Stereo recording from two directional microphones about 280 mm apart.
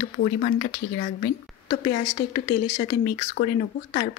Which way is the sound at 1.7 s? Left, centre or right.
Left.